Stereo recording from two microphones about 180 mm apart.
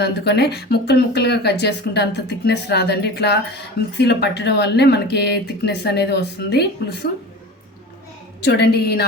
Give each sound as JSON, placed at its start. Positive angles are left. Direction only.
{"t": 0.0, "sound": "speech", "side_deg": 70}
{"t": 8.4, "sound": "a woman's voice", "side_deg": 65}